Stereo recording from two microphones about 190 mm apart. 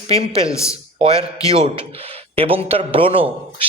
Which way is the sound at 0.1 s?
30° right (ahead or behind).